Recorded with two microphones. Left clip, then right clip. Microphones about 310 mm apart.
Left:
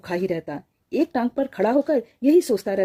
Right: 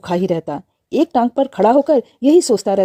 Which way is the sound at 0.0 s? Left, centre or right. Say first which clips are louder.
Right 7 dB; right.